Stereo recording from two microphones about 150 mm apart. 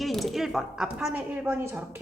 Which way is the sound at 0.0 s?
Centre (ahead or behind).